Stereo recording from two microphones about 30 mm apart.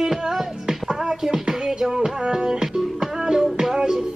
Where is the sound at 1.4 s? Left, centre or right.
Centre.